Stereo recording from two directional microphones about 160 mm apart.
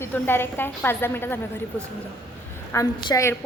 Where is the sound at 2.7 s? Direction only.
20° left (ahead or behind).